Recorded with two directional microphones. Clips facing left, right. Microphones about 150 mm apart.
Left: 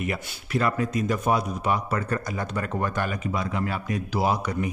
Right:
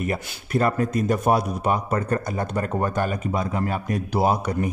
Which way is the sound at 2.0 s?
35° right (ahead or behind).